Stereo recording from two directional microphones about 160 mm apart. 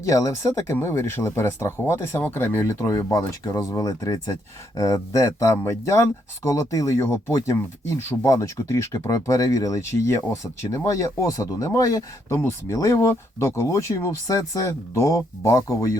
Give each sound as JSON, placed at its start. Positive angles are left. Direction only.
{"t": 0.0, "sound": "speech", "side_deg": 20}